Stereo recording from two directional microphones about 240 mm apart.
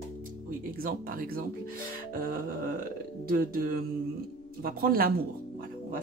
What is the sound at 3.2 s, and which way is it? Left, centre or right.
Speech, right.